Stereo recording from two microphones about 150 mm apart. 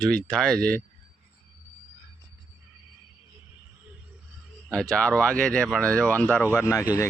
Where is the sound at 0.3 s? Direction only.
5° left (ahead or behind).